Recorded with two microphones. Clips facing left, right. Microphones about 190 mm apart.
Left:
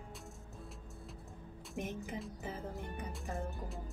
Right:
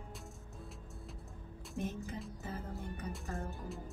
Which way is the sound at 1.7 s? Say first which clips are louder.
Right 1 dB; 15° left (ahead or behind).